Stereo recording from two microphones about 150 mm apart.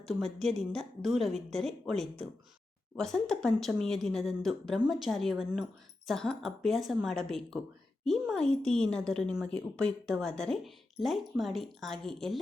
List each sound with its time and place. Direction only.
0.0 s speech: 5° left (ahead or behind)